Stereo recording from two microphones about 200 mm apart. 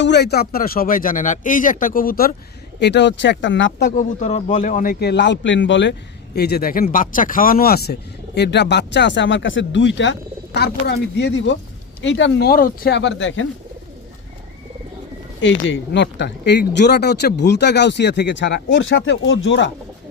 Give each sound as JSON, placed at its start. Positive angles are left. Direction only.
{"t": 0.0, "sound": "a man's voice", "side_deg": 55}
{"t": 2.8, "sound": "speech", "side_deg": 60}
{"t": 3.9, "sound": "a man's voice", "side_deg": 35}
{"t": 8.4, "sound": "speech", "side_deg": 60}
{"t": 15.4, "sound": "speech", "side_deg": 70}